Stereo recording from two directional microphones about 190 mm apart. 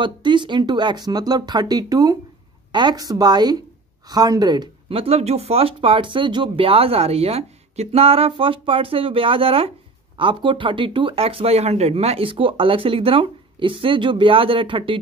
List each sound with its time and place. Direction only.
0.0 s speech: 25° right (ahead or behind)